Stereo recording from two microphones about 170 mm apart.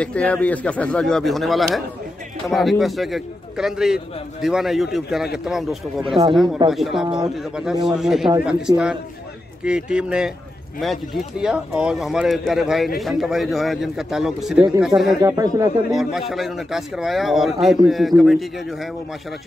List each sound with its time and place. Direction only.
0.0 s speech: 10° left (ahead or behind)
15.2 s speech: 20° right (ahead or behind)
15.9 s speech: centre (ahead or behind)